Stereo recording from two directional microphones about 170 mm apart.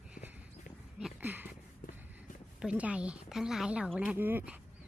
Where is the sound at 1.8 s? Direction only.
55° left (ahead or behind).